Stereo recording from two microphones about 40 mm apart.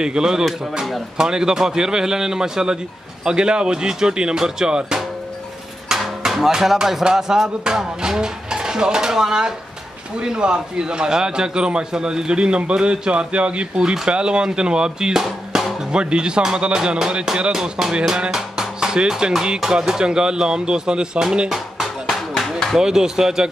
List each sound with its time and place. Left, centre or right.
0.0 s a man's voice: centre
22.4 s a sound: centre
22.8 s a man's voice: centre